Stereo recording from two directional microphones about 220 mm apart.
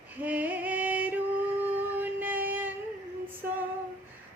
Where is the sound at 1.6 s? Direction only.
10° right (ahead or behind).